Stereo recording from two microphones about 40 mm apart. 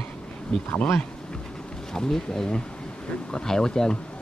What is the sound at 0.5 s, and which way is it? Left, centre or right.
Speech, centre.